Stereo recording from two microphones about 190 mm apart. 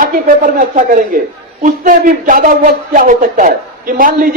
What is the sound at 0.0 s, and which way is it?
Speech, 50° right (ahead or behind).